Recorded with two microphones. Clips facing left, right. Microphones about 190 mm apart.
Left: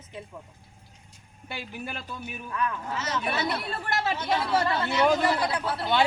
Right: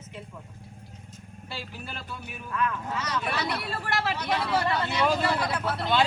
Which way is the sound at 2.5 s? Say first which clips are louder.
Right 1 dB; 25° left (ahead or behind).